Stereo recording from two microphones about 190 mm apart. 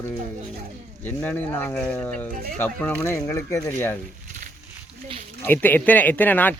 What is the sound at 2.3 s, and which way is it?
Speech, 50° right (ahead or behind).